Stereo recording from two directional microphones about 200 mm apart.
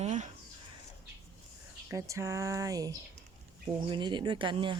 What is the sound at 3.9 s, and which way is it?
Speech, 25° right (ahead or behind).